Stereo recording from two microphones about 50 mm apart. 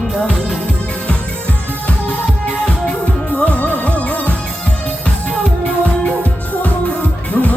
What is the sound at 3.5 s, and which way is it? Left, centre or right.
Music, left.